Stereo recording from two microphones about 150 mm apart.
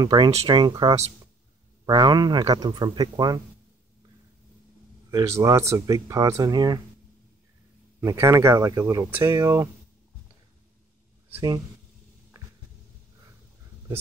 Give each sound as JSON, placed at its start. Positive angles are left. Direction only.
{"t": 0.0, "sound": "speech", "side_deg": -30}
{"t": 5.1, "sound": "speech", "side_deg": -20}
{"t": 8.0, "sound": "speech", "side_deg": -20}